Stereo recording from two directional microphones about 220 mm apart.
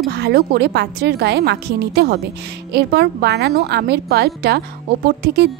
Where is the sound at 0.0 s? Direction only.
50° right (ahead or behind).